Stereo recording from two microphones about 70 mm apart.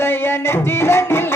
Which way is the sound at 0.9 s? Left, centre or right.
Left.